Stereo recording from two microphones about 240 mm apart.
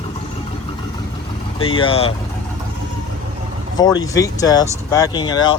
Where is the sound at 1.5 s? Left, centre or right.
Left.